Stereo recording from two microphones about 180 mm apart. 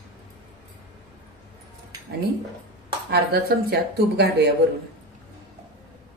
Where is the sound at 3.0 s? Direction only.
65° right (ahead or behind).